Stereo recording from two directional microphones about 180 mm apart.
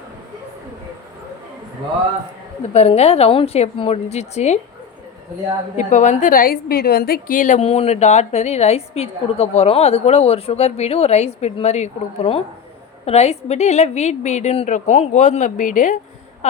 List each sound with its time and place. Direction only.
2.7 s a woman's voice: 35° left (ahead or behind)
5.7 s a woman's voice: 40° left (ahead or behind)